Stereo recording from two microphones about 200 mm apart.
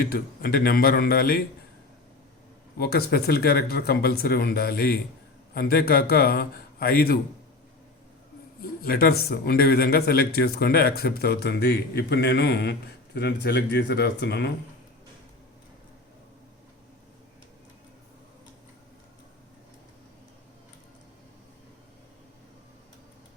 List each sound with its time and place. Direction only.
0.0 s speech: 50° left (ahead or behind)
2.7 s speech: 50° left (ahead or behind)
8.8 s speech: 50° left (ahead or behind)